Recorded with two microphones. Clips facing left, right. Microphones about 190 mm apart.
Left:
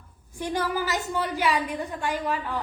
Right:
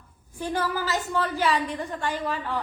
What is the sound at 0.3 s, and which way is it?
A woman's voice, 15° left (ahead or behind).